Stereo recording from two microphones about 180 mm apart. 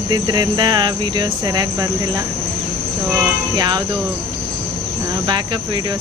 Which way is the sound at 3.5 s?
20° right (ahead or behind).